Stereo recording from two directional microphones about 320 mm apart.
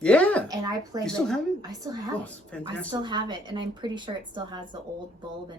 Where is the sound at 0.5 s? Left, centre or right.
Centre.